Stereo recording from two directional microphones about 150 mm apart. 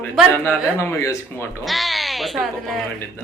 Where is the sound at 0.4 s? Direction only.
15° left (ahead or behind).